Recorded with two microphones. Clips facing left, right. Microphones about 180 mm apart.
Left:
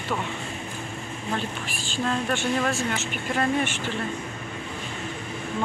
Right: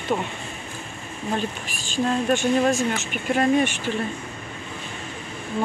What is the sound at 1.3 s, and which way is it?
Speech, 15° right (ahead or behind).